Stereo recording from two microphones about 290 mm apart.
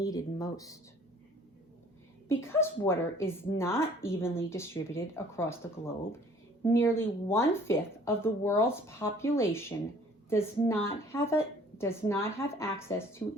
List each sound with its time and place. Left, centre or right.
0.0 s speech: centre
2.3 s speech: centre